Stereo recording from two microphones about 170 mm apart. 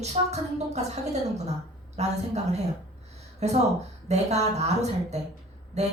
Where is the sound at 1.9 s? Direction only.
40° right (ahead or behind).